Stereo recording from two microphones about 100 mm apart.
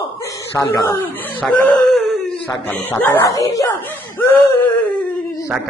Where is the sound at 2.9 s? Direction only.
20° left (ahead or behind).